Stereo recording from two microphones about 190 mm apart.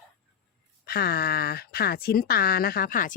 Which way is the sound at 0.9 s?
55° left (ahead or behind).